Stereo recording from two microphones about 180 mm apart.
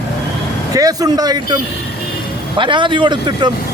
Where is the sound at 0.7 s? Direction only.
20° right (ahead or behind).